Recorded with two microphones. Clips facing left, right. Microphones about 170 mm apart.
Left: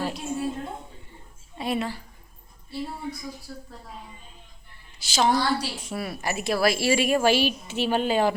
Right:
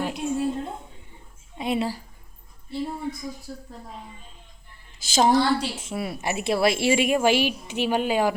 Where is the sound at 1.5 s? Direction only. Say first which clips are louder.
Right 2 dB; 20° right (ahead or behind).